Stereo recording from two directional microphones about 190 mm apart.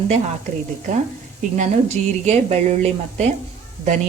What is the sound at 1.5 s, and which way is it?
A woman's voice, 35° right (ahead or behind).